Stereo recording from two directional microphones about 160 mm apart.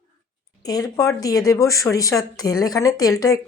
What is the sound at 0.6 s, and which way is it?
Speech, 25° left (ahead or behind).